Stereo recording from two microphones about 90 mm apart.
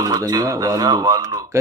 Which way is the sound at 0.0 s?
45° right (ahead or behind).